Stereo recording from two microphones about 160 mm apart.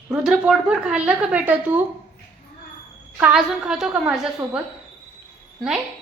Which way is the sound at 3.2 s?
5° right (ahead or behind).